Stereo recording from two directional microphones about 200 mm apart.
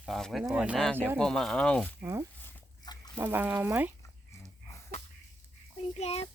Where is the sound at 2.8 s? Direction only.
20° left (ahead or behind).